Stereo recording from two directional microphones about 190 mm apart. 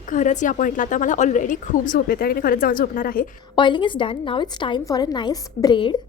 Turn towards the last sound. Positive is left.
turn(degrees=25)  # may be behind; listen again after turning